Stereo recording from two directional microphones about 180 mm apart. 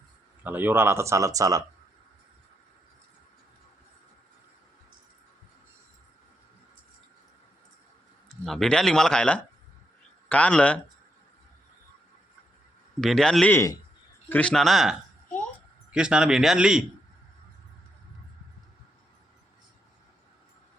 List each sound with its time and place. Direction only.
0.4 s speech: 10° right (ahead or behind)
8.4 s a man's voice: centre (ahead or behind)
13.0 s a man's voice: 5° left (ahead or behind)